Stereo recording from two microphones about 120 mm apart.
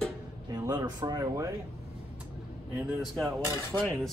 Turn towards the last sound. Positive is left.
turn(degrees=0)  # may be behind; listen again after turning